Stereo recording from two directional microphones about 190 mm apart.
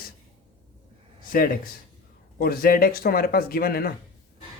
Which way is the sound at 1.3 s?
50° left (ahead or behind).